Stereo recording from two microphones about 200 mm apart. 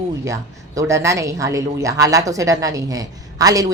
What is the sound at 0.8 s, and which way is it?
A woman's voice, 15° right (ahead or behind).